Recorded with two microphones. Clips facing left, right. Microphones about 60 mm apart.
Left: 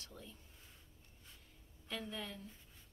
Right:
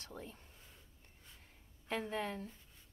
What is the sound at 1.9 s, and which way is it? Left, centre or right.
Speech, right.